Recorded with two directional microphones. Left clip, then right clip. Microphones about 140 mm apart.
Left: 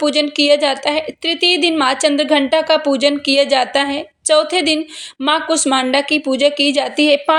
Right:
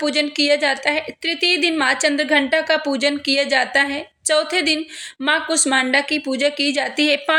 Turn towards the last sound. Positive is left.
turn(degrees=15)  # may be behind; listen again after turning